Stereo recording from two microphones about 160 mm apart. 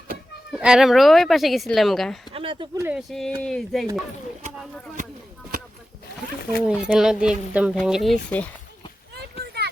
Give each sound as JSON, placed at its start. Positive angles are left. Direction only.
{"t": 0.5, "sound": "speech", "side_deg": -5}
{"t": 2.3, "sound": "speech", "side_deg": -35}
{"t": 2.7, "sound": "speech", "side_deg": -15}
{"t": 3.1, "sound": "speech", "side_deg": 5}
{"t": 6.6, "sound": "speech", "side_deg": -5}